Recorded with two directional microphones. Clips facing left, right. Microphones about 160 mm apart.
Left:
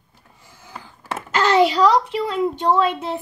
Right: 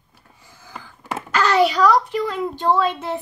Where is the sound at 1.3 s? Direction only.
25° left (ahead or behind).